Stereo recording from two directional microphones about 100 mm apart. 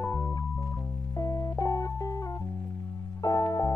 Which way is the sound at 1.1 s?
35° left (ahead or behind).